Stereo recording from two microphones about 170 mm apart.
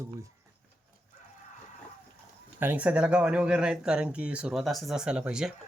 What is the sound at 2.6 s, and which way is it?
Speech, 10° right (ahead or behind).